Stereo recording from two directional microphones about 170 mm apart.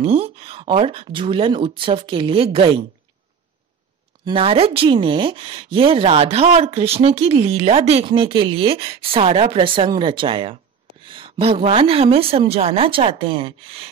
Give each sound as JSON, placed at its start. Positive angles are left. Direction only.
{"t": 0.0, "sound": "speech", "side_deg": -35}
{"t": 4.2, "sound": "speech", "side_deg": -30}